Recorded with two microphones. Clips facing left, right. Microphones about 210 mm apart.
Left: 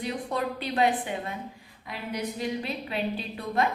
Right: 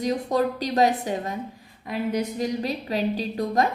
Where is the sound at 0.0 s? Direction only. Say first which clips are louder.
Right 7 dB; 40° right (ahead or behind).